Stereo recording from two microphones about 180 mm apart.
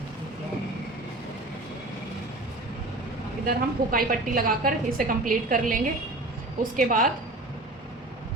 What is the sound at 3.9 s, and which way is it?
A woman's voice, 50° right (ahead or behind).